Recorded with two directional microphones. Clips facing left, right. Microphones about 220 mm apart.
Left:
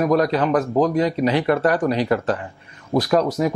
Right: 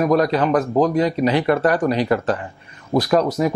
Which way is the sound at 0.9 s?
15° right (ahead or behind).